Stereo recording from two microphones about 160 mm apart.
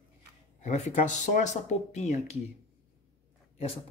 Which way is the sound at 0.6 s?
45° left (ahead or behind).